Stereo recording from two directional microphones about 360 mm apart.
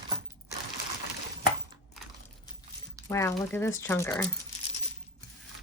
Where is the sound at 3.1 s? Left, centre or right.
Centre.